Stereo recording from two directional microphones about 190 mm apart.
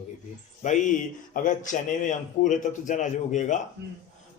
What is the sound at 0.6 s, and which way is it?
A man's voice, 40° left (ahead or behind).